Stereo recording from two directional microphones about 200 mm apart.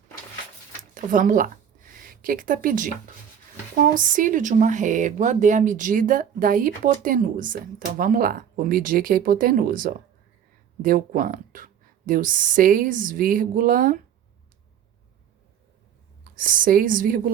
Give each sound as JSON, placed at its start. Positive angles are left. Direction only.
{"t": 0.9, "sound": "speech", "side_deg": -40}
{"t": 16.2, "sound": "speech", "side_deg": -45}